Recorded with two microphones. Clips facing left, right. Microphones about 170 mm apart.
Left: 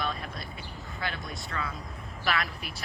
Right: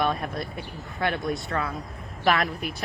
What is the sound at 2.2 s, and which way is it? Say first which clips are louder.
Speech: right 8 dB; 45° right (ahead or behind).